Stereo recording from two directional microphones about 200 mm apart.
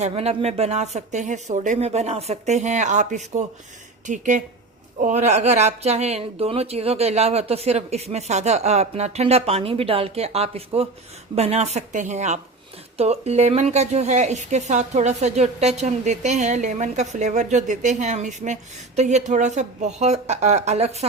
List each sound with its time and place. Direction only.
0.0 s a woman's voice: 30° right (ahead or behind)